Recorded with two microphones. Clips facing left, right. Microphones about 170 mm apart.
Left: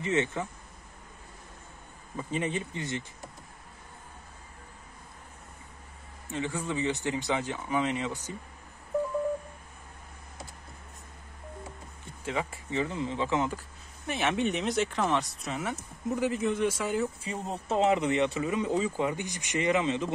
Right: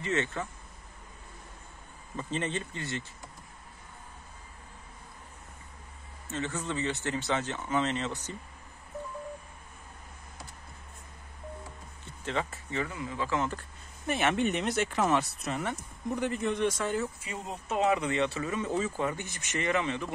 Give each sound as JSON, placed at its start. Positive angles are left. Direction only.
{"t": 0.0, "sound": "speech", "side_deg": 15}
{"t": 2.1, "sound": "speech", "side_deg": 10}
{"t": 6.2, "sound": "speech", "side_deg": 15}
{"t": 12.3, "sound": "speech", "side_deg": 10}
{"t": 14.0, "sound": "speech", "side_deg": 0}
{"t": 17.2, "sound": "speech", "side_deg": 35}